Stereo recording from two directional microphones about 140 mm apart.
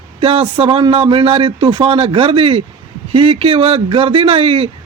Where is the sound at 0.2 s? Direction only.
40° right (ahead or behind).